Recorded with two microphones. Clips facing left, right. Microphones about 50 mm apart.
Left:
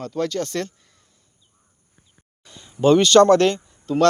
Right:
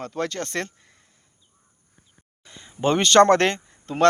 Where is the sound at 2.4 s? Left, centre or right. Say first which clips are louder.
Left 5 dB; right.